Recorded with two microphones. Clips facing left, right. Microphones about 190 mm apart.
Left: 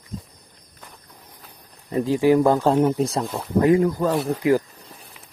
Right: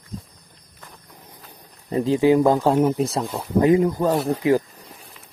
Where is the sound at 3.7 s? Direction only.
20° right (ahead or behind).